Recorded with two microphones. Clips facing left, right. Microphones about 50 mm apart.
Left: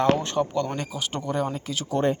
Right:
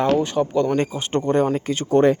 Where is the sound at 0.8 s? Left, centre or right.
Right.